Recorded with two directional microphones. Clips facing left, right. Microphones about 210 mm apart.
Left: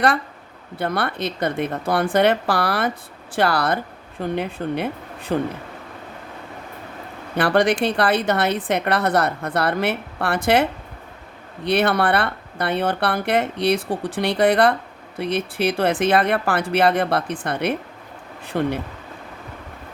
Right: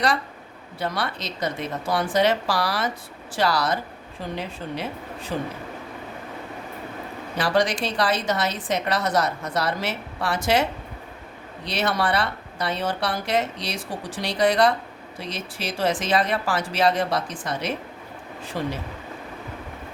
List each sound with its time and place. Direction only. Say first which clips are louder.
0.8 s a woman's voice: left 5 dB; 55° left (ahead or behind)
7.3 s a woman's voice: left 5 dB; 60° left (ahead or behind)